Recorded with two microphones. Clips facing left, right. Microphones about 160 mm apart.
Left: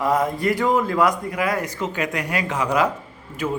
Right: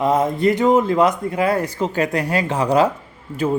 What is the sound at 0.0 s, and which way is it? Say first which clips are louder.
Speech: right 4 dB; 20° right (ahead or behind).